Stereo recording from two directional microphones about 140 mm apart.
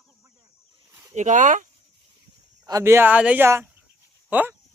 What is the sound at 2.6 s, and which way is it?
Speech, 20° right (ahead or behind).